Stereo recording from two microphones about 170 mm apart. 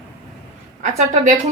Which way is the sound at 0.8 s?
40° right (ahead or behind).